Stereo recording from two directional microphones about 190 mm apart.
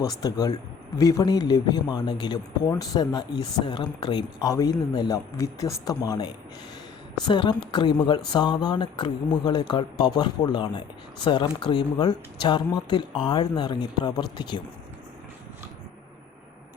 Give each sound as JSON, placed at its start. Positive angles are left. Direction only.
{"t": 0.0, "sound": "a man's voice", "side_deg": 20}